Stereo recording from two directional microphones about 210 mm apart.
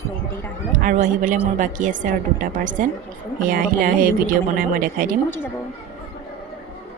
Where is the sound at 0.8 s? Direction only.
40° right (ahead or behind).